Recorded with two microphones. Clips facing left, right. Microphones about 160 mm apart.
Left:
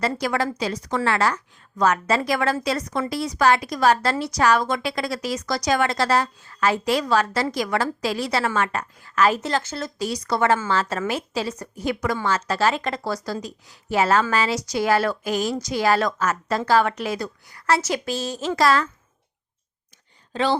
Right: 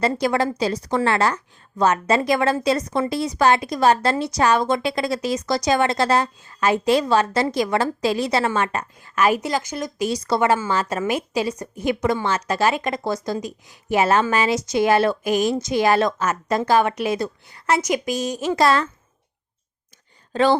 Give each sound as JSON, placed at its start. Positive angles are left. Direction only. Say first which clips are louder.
{"t": 0.0, "sound": "a woman's voice", "louder": "right 3 dB", "side_deg": -25}
{"t": 10.1, "sound": "a woman's voice", "louder": "right 3 dB", "side_deg": -25}
{"t": 10.4, "sound": "a woman's voice", "louder": "left 1 dB", "side_deg": -15}
{"t": 20.3, "sound": "a woman's voice", "louder": "right 4 dB", "side_deg": -50}